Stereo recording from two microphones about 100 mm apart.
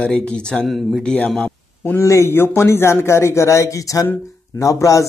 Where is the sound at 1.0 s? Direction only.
10° left (ahead or behind).